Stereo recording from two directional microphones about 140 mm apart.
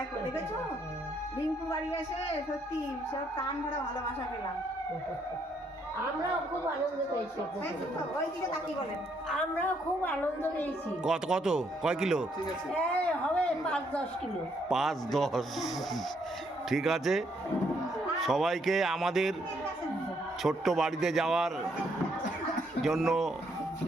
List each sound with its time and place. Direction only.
9.3 s a woman's voice: 10° left (ahead or behind)
11.0 s speech: 5° right (ahead or behind)
12.7 s a woman's voice: 10° left (ahead or behind)
20.4 s speech: centre (ahead or behind)
22.8 s speech: centre (ahead or behind)